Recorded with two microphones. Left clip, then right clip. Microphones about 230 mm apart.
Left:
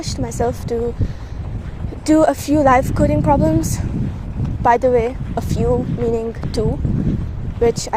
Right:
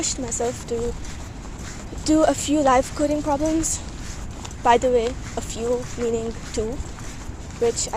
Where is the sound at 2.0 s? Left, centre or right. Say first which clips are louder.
Left 5 dB; left.